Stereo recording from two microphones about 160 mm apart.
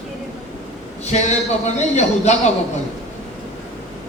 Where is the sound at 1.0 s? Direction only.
45° left (ahead or behind).